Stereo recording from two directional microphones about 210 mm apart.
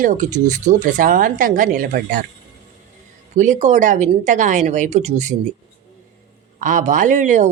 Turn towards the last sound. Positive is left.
turn(degrees=-35)  # may be behind; listen again after turning